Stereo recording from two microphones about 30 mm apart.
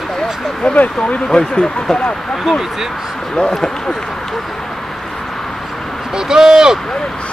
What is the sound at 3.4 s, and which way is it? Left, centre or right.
Speech, centre.